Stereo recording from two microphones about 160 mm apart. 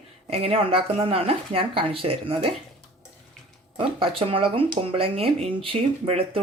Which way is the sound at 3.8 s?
35° right (ahead or behind).